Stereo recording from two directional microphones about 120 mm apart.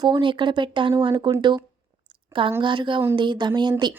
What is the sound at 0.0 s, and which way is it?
Speech, 40° right (ahead or behind).